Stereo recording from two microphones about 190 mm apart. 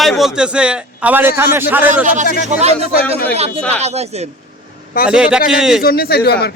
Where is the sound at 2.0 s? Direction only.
40° right (ahead or behind).